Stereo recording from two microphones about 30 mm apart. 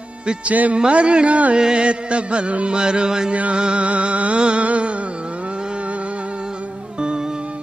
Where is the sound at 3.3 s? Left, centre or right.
Right.